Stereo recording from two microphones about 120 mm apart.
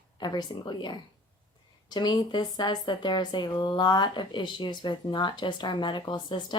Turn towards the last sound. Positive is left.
turn(degrees=40)  # may be behind; listen again after turning